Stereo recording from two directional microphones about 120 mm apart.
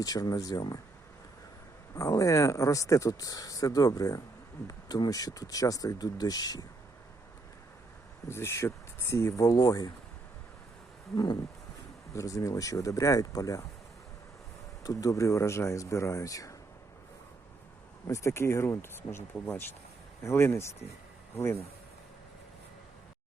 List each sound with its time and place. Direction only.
0.0 s speech: 30° left (ahead or behind)
2.0 s speech: 30° left (ahead or behind)
8.3 s speech: 20° left (ahead or behind)
12.1 s speech: 25° left (ahead or behind)
14.8 s speech: 30° left (ahead or behind)
18.1 s speech: 25° left (ahead or behind)